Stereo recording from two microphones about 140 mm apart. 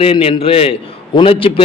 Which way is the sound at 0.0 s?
40° left (ahead or behind).